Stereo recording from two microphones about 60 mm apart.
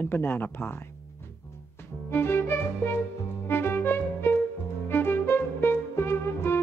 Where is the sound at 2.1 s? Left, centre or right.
Left.